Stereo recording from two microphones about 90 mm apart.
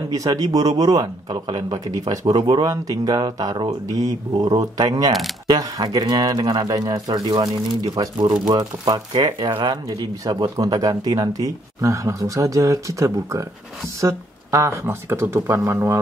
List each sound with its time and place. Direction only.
0.1 s a man's voice: 40° right (ahead or behind)